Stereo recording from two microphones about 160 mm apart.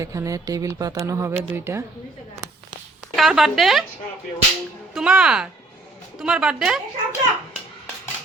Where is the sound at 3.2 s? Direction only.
Centre (ahead or behind).